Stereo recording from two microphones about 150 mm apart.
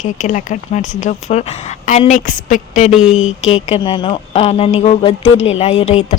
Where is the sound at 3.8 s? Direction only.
30° left (ahead or behind).